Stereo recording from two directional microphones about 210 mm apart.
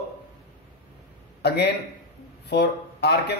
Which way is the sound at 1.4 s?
50° left (ahead or behind).